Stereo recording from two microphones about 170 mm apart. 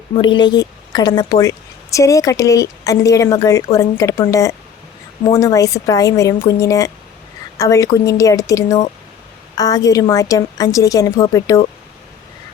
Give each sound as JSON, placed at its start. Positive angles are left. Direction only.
{"t": 0.2, "sound": "a woman's voice", "side_deg": 25}